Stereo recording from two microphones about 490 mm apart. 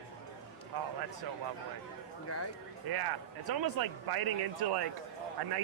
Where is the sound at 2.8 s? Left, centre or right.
Right.